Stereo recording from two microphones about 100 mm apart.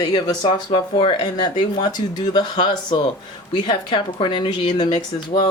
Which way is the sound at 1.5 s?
45° left (ahead or behind).